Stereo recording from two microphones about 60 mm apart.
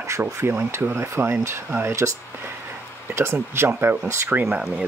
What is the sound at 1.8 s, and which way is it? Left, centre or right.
Speech, right.